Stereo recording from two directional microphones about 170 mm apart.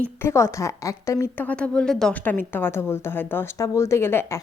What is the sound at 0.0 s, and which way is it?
A woman's voice, 15° left (ahead or behind).